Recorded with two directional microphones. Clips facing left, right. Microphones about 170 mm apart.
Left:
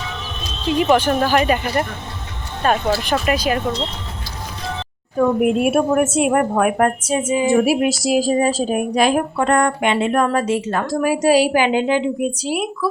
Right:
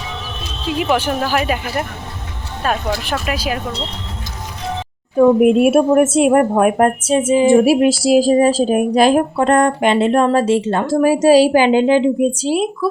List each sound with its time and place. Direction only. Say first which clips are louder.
0.7 s speech: left 2 dB; 5° right (ahead or behind)
5.1 s a woman's voice: right 6 dB; 25° right (ahead or behind)